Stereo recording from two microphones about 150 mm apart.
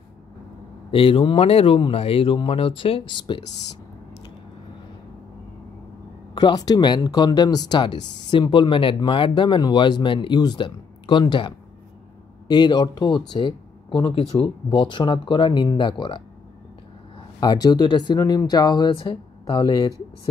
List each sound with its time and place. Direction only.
0.9 s speech: 35° left (ahead or behind)
6.3 s speech: 25° left (ahead or behind)
17.4 s speech: 30° left (ahead or behind)